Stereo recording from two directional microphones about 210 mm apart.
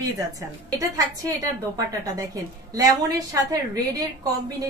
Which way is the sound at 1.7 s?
15° right (ahead or behind).